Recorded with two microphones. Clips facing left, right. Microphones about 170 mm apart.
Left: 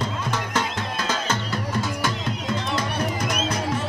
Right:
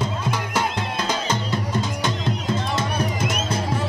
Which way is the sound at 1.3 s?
20° right (ahead or behind).